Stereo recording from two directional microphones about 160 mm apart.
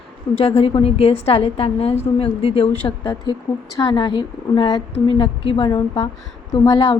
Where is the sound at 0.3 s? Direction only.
40° left (ahead or behind).